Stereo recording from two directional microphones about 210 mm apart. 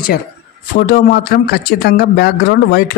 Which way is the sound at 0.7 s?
45° left (ahead or behind).